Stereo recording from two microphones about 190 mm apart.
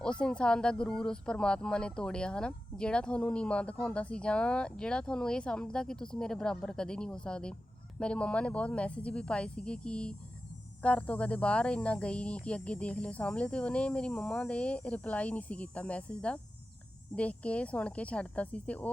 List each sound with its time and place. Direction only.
0.0 s speech: 5° left (ahead or behind)